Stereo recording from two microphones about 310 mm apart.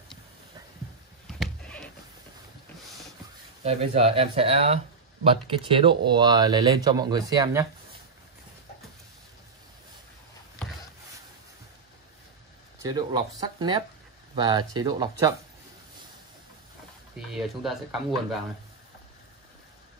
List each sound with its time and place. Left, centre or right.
1.4 s a sound: centre
3.6 s speech: centre
12.8 s speech: centre
17.3 s speech: centre